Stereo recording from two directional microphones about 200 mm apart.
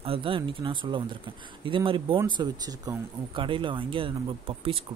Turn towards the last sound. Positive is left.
turn(degrees=-25)  # may be behind; listen again after turning